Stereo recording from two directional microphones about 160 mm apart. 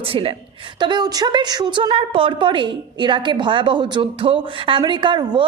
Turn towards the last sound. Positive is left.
turn(degrees=-30)  # may be behind; listen again after turning